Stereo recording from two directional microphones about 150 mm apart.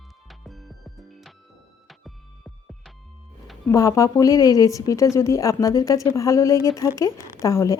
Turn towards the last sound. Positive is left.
turn(degrees=20)  # may be behind; listen again after turning